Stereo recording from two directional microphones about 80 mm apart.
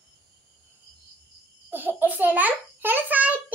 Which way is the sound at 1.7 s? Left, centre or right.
Right.